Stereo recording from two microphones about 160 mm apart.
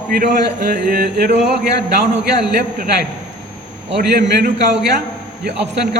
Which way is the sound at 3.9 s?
90° right.